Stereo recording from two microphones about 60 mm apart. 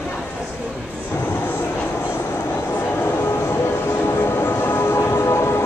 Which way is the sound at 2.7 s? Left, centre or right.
Left.